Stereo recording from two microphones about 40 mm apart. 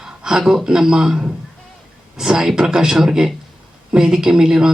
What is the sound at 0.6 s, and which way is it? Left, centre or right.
Speech, centre.